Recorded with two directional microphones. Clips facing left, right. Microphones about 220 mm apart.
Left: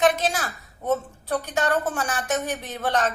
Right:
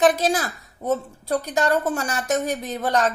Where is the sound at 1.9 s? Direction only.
40° right (ahead or behind).